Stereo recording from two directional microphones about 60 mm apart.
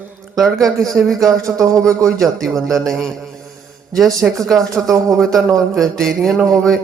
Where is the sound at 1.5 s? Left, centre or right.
Right.